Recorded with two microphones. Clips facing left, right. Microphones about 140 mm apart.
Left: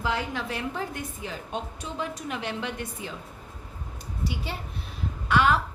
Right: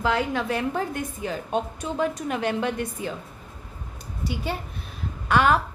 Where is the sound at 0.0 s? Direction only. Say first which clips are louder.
Right 5 dB; 60° right (ahead or behind).